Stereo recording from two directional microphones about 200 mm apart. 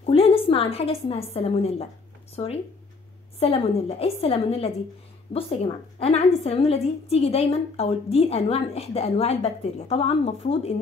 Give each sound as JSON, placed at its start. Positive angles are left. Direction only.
{"t": 0.0, "sound": "a woman's voice", "side_deg": 30}